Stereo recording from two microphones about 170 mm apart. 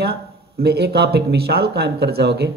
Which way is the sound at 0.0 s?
65° right (ahead or behind).